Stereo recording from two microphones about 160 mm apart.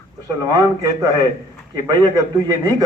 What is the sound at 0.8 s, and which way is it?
A man's voice, 20° right (ahead or behind).